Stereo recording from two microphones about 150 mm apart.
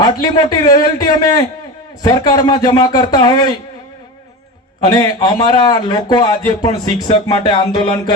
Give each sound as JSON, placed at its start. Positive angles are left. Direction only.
{"t": 0.0, "sound": "a man's voice", "side_deg": 30}
{"t": 4.9, "sound": "a man's voice", "side_deg": 30}
{"t": 7.0, "sound": "music", "side_deg": 35}